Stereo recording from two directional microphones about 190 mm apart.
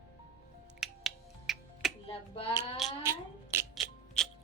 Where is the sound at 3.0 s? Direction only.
15° right (ahead or behind).